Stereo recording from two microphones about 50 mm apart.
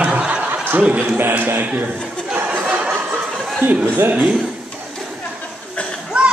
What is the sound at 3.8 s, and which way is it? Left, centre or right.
Music, right.